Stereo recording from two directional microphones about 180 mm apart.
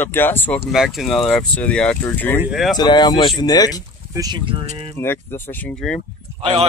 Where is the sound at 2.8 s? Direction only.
25° left (ahead or behind).